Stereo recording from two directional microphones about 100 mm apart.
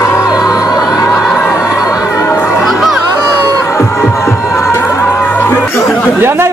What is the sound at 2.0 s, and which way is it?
Chatter, 25° left (ahead or behind).